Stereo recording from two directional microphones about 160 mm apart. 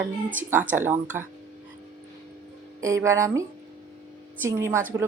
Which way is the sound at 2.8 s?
20° right (ahead or behind).